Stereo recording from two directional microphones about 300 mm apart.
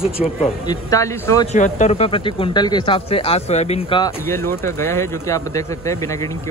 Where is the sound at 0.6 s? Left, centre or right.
Centre.